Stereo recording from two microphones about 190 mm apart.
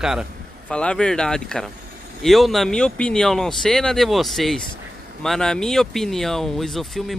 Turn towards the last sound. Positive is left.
turn(degrees=0)  # may be behind; listen again after turning